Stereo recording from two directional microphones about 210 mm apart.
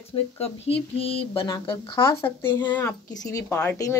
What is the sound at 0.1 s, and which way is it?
Speech, 25° left (ahead or behind).